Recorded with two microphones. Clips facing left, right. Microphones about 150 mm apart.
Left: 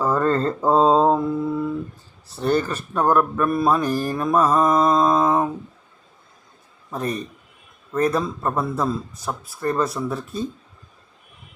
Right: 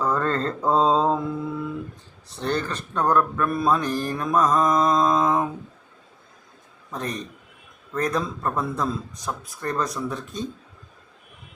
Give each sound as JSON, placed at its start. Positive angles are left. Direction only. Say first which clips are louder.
{"t": 0.0, "sound": "mantra", "louder": "left 4 dB", "side_deg": 10}
{"t": 2.2, "sound": "mantra", "louder": "left 5 dB", "side_deg": 5}
{"t": 6.9, "sound": "mantra", "louder": "left 4 dB", "side_deg": 5}
{"t": 7.9, "sound": "speech", "louder": "left 4 dB", "side_deg": 5}